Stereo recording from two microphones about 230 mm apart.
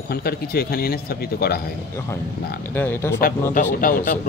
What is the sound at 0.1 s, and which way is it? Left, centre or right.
Speech, left.